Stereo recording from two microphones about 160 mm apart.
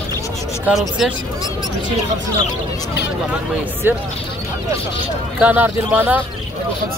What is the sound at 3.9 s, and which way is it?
Speech, 15° right (ahead or behind).